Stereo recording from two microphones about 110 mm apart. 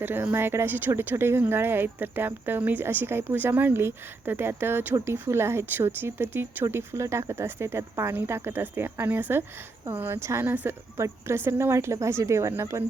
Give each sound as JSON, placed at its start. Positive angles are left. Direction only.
{"t": 0.0, "sound": "speech", "side_deg": -20}